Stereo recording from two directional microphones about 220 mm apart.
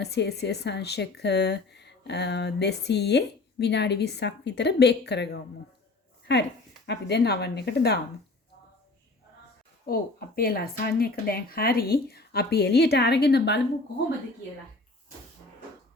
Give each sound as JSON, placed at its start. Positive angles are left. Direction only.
{"t": 0.0, "sound": "a woman's voice", "side_deg": 50}
{"t": 9.8, "sound": "a woman's voice", "side_deg": 45}